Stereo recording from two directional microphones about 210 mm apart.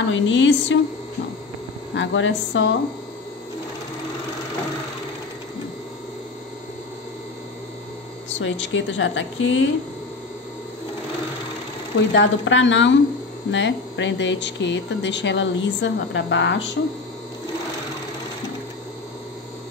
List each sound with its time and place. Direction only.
0.1 s speech: 60° left (ahead or behind)
2.0 s speech: 65° left (ahead or behind)
8.4 s speech: 65° left (ahead or behind)
12.1 s speech: 60° left (ahead or behind)